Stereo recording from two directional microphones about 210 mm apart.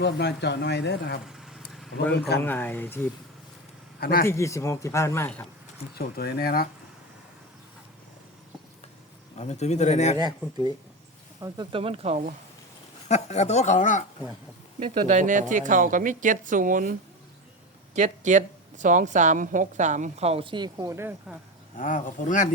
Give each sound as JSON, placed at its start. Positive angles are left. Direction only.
{"t": 0.0, "sound": "speech", "side_deg": 55}
{"t": 1.3, "sound": "vehicle", "side_deg": 0}
{"t": 1.7, "sound": "a sound", "side_deg": 0}
{"t": 2.4, "sound": "speech", "side_deg": 10}
{"t": 4.0, "sound": "speech", "side_deg": 45}
{"t": 4.3, "sound": "speech", "side_deg": 15}
{"t": 6.0, "sound": "speech", "side_deg": 45}
{"t": 9.4, "sound": "speech", "side_deg": 30}
{"t": 11.3, "sound": "speech", "side_deg": -20}
{"t": 13.1, "sound": "speech", "side_deg": 30}
{"t": 14.8, "sound": "a woman's voice", "side_deg": -30}
{"t": 17.9, "sound": "a woman's voice", "side_deg": -35}
{"t": 21.8, "sound": "speech", "side_deg": 40}